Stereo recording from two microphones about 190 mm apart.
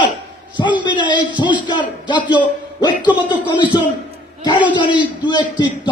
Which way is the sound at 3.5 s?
25° left (ahead or behind).